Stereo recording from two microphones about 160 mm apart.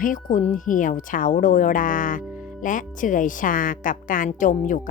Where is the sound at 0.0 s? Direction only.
55° left (ahead or behind).